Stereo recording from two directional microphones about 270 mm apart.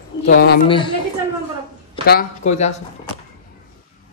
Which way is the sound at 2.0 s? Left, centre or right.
Left.